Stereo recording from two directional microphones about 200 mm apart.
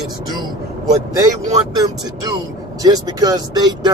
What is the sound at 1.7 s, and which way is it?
Speech, 20° right (ahead or behind).